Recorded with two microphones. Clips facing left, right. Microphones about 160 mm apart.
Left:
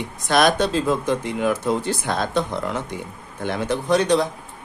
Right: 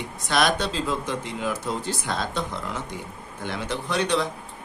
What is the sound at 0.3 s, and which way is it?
Speech, 50° left (ahead or behind).